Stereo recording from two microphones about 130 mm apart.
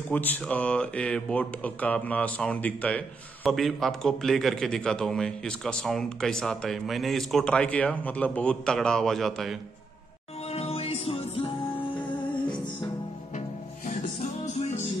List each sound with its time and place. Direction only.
0.1 s a man's voice: 15° left (ahead or behind)
10.5 s music: 50° left (ahead or behind)